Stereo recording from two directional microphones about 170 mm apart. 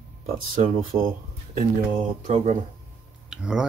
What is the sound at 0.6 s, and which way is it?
Speech, 55° right (ahead or behind).